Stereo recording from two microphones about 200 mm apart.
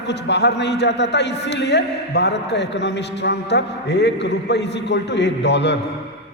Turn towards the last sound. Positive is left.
turn(degrees=60)  # may be behind; listen again after turning